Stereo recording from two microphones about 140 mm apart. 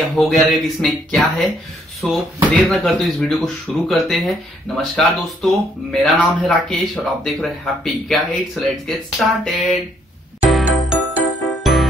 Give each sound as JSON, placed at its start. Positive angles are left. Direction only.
{"t": 0.1, "sound": "speech", "side_deg": 0}
{"t": 10.5, "sound": "music", "side_deg": -5}